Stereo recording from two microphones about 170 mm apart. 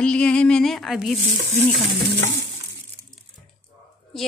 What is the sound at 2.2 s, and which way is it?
Stir, 90° right.